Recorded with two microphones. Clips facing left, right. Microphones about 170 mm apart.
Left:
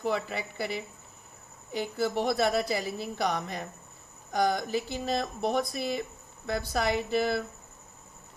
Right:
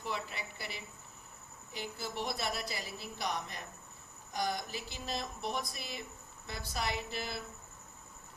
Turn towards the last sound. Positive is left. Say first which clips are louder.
# left 12 dB
turn(degrees=60)  # may be behind; listen again after turning